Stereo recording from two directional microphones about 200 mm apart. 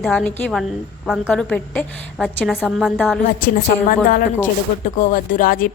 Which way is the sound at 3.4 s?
45° left (ahead or behind).